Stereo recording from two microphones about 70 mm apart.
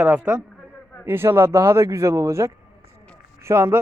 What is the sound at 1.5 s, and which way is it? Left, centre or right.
Speech, right.